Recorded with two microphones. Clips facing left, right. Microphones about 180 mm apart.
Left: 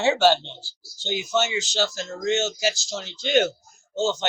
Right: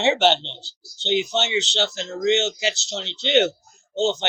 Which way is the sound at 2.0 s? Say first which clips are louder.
Right 7 dB; 20° right (ahead or behind).